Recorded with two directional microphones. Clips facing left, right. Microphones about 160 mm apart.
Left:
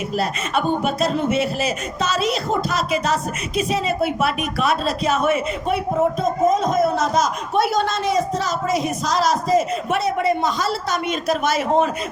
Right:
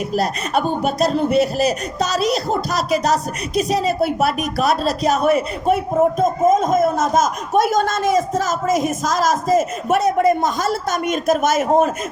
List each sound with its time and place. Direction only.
0.1 s speech: 40° right (ahead or behind)